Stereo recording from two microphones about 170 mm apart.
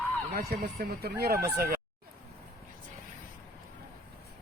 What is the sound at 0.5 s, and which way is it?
Speech, 70° right (ahead or behind).